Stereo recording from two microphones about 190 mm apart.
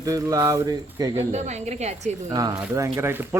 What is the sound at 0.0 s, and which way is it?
Speech, 20° right (ahead or behind).